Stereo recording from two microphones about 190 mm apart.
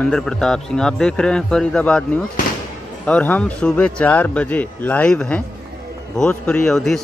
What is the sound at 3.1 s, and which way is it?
A man's voice, 5° left (ahead or behind).